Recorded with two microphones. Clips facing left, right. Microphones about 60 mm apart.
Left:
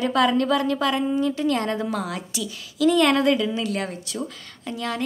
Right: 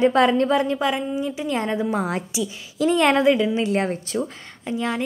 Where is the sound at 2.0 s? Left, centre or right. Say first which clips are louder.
Right 4 dB; right.